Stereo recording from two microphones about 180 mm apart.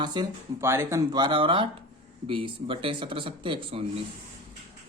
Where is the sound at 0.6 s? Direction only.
15° right (ahead or behind).